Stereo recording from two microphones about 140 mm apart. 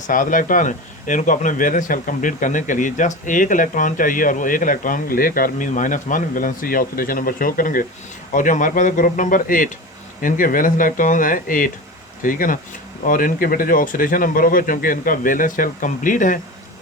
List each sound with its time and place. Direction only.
0.1 s speech: 70° left (ahead or behind)
8.3 s speech: 70° left (ahead or behind)